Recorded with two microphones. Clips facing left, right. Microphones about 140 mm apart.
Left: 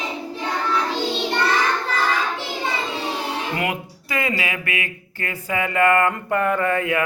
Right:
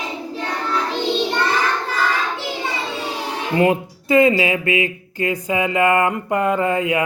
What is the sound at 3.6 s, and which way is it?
Speech, 25° right (ahead or behind).